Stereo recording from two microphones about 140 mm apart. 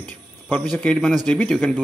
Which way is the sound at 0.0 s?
5° left (ahead or behind).